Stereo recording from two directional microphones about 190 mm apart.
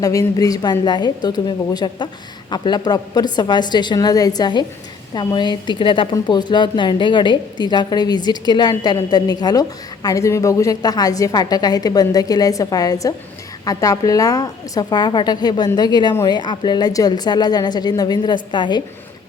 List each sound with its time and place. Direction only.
0.0 s a woman's voice: 20° left (ahead or behind)